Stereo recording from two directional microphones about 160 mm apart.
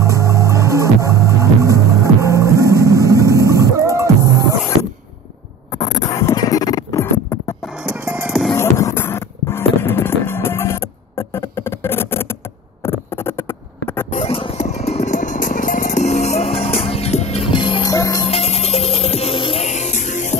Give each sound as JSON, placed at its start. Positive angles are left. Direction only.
{"t": 0.0, "sound": "music", "side_deg": -20}
{"t": 5.9, "sound": "music", "side_deg": 20}
{"t": 7.6, "sound": "music", "side_deg": -5}
{"t": 8.5, "sound": "music", "side_deg": 15}
{"t": 12.8, "sound": "a sound", "side_deg": 15}
{"t": 14.1, "sound": "music", "side_deg": 35}
{"t": 18.2, "sound": "music", "side_deg": 40}